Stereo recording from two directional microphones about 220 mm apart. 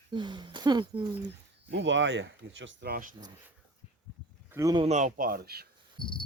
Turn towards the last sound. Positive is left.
turn(degrees=20)  # may be behind; listen again after turning